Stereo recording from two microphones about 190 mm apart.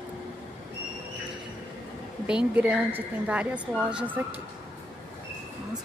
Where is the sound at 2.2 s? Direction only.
5° right (ahead or behind).